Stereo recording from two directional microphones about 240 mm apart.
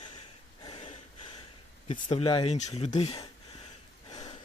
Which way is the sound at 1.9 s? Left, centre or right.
Left.